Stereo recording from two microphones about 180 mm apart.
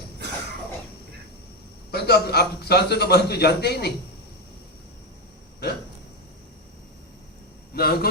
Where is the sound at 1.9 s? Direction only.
60° left (ahead or behind).